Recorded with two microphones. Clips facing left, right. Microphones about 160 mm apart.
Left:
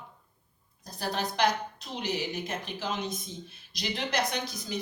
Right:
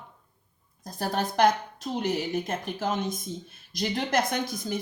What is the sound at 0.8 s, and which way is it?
Speech, 50° right (ahead or behind).